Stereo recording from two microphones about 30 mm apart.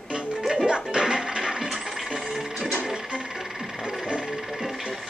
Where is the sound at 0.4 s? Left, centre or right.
Centre.